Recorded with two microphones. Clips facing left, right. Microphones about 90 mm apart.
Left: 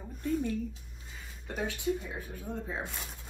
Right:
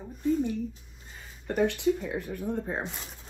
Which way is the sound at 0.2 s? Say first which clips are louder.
Right 5 dB; 20° right (ahead or behind).